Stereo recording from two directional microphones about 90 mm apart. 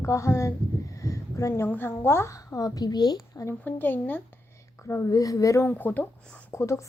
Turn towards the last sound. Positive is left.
turn(degrees=35)  # may be behind; listen again after turning